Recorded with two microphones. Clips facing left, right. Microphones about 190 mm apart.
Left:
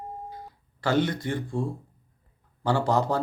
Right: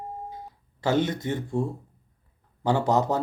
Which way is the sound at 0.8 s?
20° right (ahead or behind).